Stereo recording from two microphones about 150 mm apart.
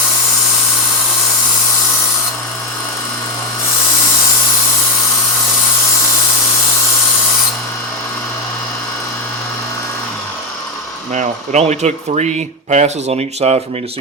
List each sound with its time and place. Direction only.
11.1 s speech: 50° right (ahead or behind)